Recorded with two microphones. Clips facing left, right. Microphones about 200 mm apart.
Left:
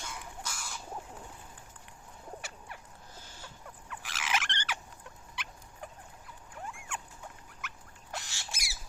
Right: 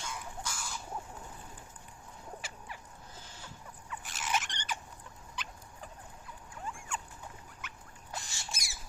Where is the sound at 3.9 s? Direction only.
90° left.